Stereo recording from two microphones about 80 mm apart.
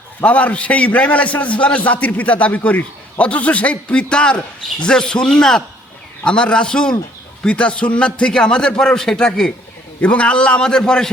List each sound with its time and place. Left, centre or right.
0.2 s a man's voice: centre